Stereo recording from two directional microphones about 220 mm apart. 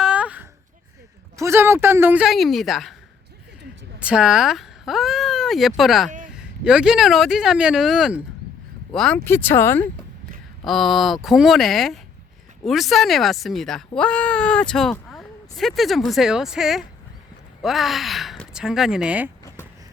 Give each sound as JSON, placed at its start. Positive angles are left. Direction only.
{"t": 0.0, "sound": "a sound", "side_deg": -5}
{"t": 1.4, "sound": "a woman's voice", "side_deg": -10}
{"t": 4.0, "sound": "speech", "side_deg": -5}
{"t": 6.1, "sound": "a sound", "side_deg": -35}
{"t": 6.3, "sound": "speech", "side_deg": -5}
{"t": 10.7, "sound": "speech", "side_deg": 0}